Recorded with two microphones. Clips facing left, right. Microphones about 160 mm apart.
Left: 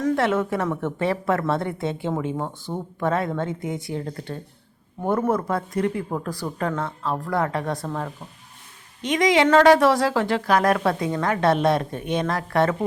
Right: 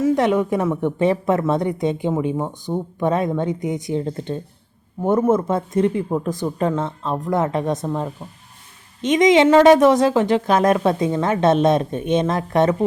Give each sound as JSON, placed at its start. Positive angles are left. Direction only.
{"t": 0.1, "sound": "a woman's voice", "side_deg": -15}